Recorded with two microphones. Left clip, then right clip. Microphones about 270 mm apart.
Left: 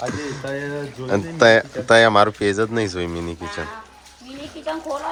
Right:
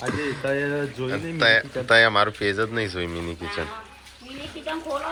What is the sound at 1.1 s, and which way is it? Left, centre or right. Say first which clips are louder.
Speech: left 6 dB; centre.